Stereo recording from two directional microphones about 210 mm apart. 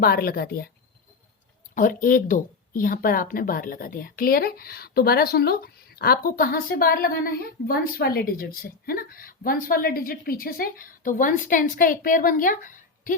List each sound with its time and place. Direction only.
0.0 s speech: 45° left (ahead or behind)
1.7 s speech: 40° left (ahead or behind)